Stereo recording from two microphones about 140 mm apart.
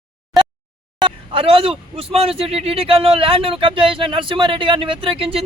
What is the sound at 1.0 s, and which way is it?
Speech, 40° right (ahead or behind).